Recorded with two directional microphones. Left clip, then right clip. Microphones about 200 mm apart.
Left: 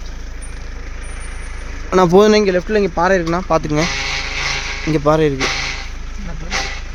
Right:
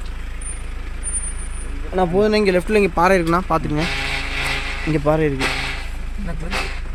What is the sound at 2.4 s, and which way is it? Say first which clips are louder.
Speech: left 1 dB; 10° left (ahead or behind).